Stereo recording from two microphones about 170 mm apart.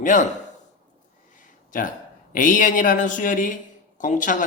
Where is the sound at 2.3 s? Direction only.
50° left (ahead or behind).